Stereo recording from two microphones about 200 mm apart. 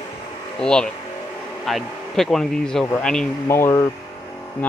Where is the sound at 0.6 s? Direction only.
5° left (ahead or behind).